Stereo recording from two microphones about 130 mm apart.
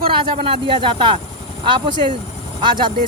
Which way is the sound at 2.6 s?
40° right (ahead or behind).